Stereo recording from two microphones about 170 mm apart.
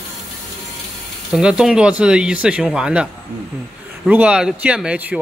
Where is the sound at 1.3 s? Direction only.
5° right (ahead or behind).